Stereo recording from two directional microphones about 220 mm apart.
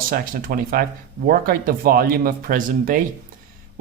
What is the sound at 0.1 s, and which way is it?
A man's voice, 40° right (ahead or behind).